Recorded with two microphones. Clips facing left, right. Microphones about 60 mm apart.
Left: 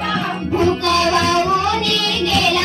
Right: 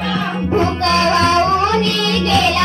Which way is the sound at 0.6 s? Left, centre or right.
Right.